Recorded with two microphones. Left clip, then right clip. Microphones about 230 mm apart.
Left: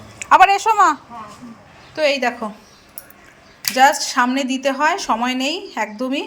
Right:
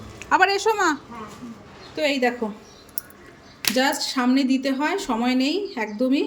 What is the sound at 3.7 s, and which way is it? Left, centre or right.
A woman's voice, centre.